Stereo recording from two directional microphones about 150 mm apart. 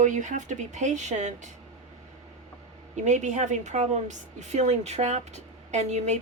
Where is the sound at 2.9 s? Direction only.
50° right (ahead or behind).